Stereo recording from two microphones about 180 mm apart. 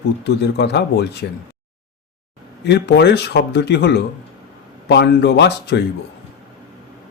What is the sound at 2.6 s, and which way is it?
Speech, 70° left (ahead or behind).